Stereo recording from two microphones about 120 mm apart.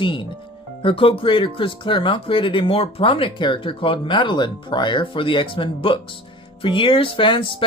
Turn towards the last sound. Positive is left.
turn(degrees=45)  # may be behind; listen again after turning